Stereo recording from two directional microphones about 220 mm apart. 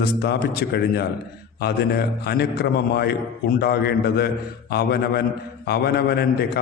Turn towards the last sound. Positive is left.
turn(degrees=45)  # may be behind; listen again after turning